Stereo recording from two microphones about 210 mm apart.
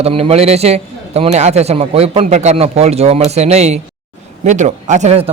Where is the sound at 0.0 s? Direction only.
30° right (ahead or behind).